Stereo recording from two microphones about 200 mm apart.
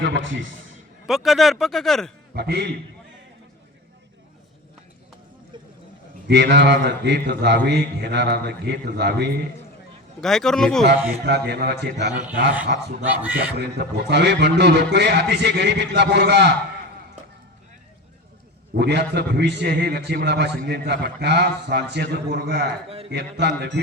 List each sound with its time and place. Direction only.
0.0 s a man's voice: 70° right (ahead or behind)
1.0 s speech: centre (ahead or behind)
2.3 s a man's voice: 55° right (ahead or behind)
6.2 s a man's voice: 60° right (ahead or behind)
10.2 s speech: centre (ahead or behind)
11.3 s a man's voice: 55° right (ahead or behind)
13.0 s speech: 10° right (ahead or behind)
13.6 s a man's voice: 55° right (ahead or behind)
18.7 s a man's voice: 55° right (ahead or behind)